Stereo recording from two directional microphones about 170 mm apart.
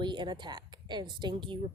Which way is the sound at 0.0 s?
25° right (ahead or behind).